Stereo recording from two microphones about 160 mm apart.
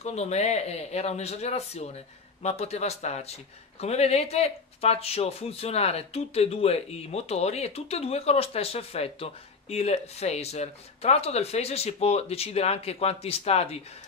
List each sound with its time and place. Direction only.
0.0 s speech: 40° left (ahead or behind)